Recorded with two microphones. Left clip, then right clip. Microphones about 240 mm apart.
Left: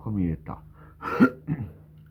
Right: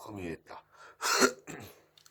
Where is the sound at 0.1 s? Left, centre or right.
Right.